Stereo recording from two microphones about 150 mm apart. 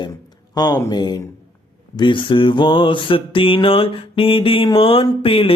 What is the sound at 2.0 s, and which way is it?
Mantra, 35° left (ahead or behind).